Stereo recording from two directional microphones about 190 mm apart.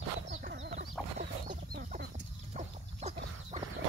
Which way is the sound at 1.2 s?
40° right (ahead or behind).